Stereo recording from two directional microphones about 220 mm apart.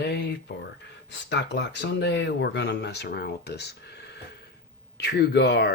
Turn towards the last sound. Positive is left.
turn(degrees=50)  # may be behind; listen again after turning